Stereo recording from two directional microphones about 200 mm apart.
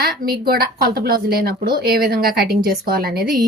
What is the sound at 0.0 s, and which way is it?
Speech, 50° right (ahead or behind).